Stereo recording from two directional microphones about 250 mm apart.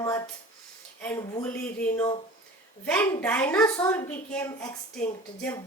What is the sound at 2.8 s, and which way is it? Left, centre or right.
A child's voice, centre.